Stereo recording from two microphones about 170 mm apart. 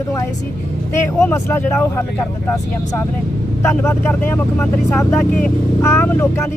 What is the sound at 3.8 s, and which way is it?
Speech, 10° left (ahead or behind).